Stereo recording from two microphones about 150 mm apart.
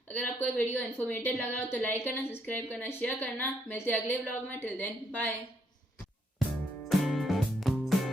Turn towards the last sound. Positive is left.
turn(degrees=0)  # may be behind; listen again after turning